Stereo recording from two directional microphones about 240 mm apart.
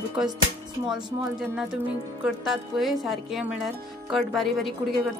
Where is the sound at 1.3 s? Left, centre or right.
Centre.